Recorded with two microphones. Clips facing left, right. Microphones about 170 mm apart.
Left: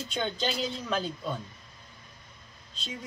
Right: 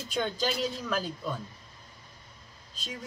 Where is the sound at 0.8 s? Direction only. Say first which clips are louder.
Left 1 dB; 25° left (ahead or behind).